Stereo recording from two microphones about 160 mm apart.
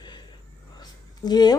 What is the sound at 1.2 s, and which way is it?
Speech, 25° left (ahead or behind).